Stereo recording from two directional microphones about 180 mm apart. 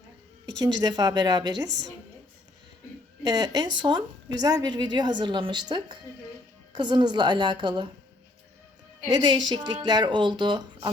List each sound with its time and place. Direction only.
0.6 s a woman's voice: 25° right (ahead or behind)
3.2 s a woman's voice: 20° right (ahead or behind)
9.0 s a woman's voice: 25° right (ahead or behind)